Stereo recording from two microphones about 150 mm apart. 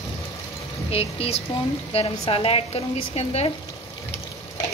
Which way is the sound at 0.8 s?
40° left (ahead or behind).